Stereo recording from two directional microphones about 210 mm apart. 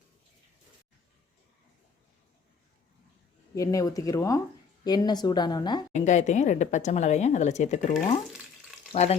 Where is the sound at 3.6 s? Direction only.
15° left (ahead or behind).